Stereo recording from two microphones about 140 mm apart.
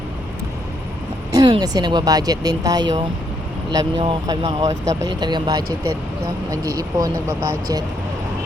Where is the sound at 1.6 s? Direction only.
30° right (ahead or behind).